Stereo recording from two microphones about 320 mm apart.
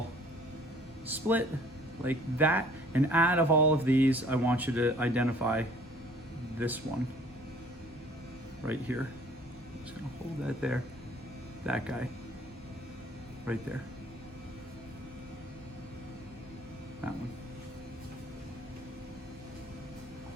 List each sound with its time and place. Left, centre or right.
1.0 s speech: centre
8.6 s speech: centre
10.4 s speech: centre
13.5 s speech: centre